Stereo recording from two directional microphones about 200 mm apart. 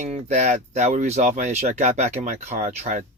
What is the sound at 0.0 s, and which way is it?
Speech, 35° right (ahead or behind).